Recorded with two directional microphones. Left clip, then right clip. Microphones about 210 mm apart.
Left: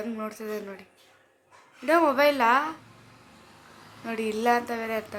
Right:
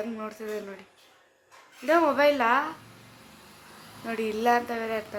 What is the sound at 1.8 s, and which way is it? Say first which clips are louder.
Speech: even; 15° left (ahead or behind).